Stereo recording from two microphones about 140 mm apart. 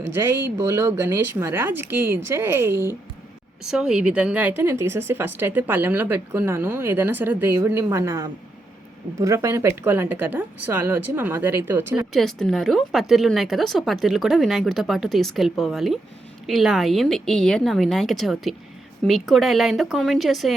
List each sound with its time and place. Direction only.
0.1 s a woman's voice: 15° right (ahead or behind)
3.7 s a woman's voice: 5° right (ahead or behind)
12.1 s a woman's voice: centre (ahead or behind)